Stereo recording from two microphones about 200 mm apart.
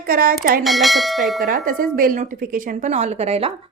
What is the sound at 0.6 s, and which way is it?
Speech, centre (ahead or behind).